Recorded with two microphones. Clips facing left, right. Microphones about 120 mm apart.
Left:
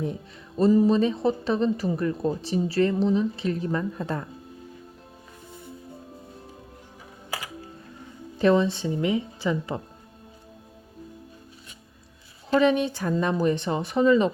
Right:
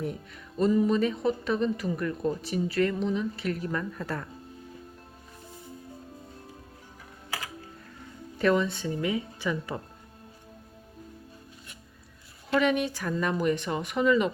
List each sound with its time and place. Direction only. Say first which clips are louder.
0.5 s a woman's voice: left 4 dB; 35° left (ahead or behind)
8.4 s speech: left 4 dB; 25° left (ahead or behind)
12.5 s a woman's voice: left 4 dB; 30° left (ahead or behind)